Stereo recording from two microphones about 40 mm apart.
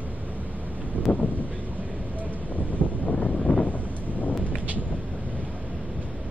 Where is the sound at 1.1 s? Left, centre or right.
Left.